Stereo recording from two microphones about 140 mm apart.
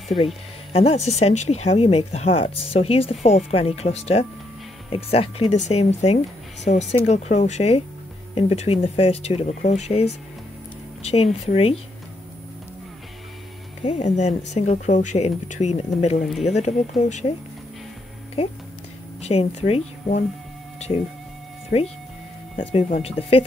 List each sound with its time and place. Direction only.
0.7 s speech: 45° left (ahead or behind)
5.5 s speech: 55° left (ahead or behind)
9.5 s speech: 55° left (ahead or behind)
13.8 s speech: 55° left (ahead or behind)
19.2 s speech: 45° left (ahead or behind)
21.7 s speech: 50° left (ahead or behind)